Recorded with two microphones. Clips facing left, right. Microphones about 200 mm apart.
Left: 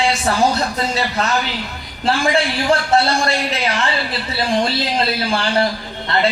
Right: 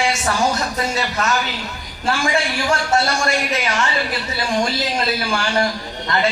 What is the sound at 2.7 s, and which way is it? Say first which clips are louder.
Speech: left 3 dB; 35° left (ahead or behind).